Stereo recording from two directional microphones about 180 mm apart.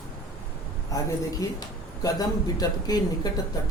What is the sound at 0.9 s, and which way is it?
Speech, 20° left (ahead or behind).